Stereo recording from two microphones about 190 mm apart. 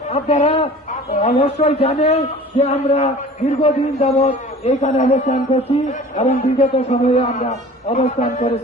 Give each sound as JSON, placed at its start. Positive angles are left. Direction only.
{"t": 0.1, "sound": "a man's voice", "side_deg": 35}